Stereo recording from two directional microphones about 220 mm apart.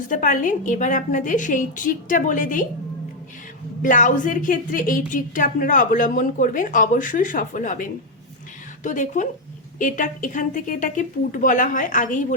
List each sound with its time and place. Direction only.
0.1 s speech: 35° left (ahead or behind)
3.8 s speech: 35° left (ahead or behind)